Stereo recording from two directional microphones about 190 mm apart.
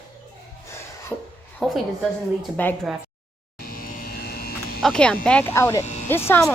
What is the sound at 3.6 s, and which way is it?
Electric shaver, 50° left (ahead or behind).